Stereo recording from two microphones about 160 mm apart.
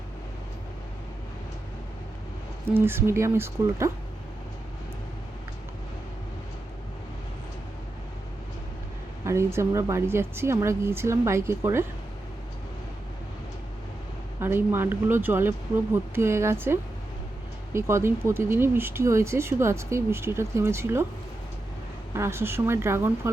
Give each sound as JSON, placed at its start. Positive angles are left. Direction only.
{"t": 2.6, "sound": "speech", "side_deg": -15}
{"t": 9.2, "sound": "speech", "side_deg": -15}
{"t": 14.4, "sound": "speech", "side_deg": -15}
{"t": 17.7, "sound": "speech", "side_deg": -15}
{"t": 22.1, "sound": "speech", "side_deg": -15}